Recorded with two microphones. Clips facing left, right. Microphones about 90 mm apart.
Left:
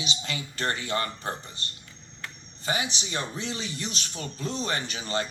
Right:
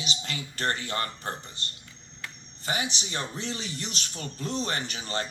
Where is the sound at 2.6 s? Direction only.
20° left (ahead or behind).